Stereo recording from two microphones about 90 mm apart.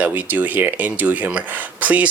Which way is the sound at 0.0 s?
20° right (ahead or behind).